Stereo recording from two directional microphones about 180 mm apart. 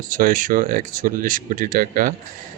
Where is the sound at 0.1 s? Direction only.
50° right (ahead or behind).